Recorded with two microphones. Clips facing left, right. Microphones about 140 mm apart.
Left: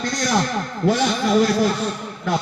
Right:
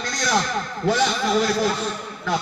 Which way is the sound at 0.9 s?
50° left (ahead or behind).